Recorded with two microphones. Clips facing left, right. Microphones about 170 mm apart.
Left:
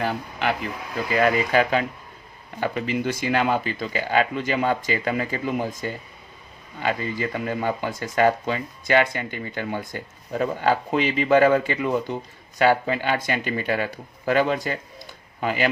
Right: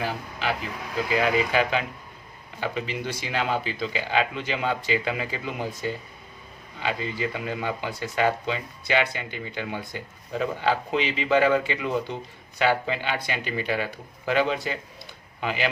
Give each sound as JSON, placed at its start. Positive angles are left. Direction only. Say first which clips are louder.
{"t": 0.0, "sound": "speech", "louder": "left 4 dB", "side_deg": 60}
{"t": 6.7, "sound": "speech", "louder": "left 3 dB", "side_deg": 50}